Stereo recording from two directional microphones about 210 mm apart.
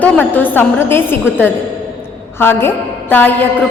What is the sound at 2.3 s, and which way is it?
A woman's voice, 10° left (ahead or behind).